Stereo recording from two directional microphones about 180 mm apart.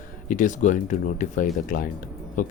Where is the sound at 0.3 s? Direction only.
45° left (ahead or behind).